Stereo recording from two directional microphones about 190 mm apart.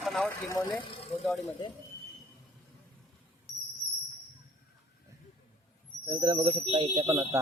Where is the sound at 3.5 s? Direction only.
Centre (ahead or behind).